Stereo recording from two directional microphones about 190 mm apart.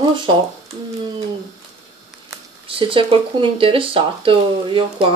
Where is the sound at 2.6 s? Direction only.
30° right (ahead or behind).